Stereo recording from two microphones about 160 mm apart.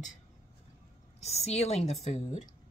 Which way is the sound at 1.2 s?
40° left (ahead or behind).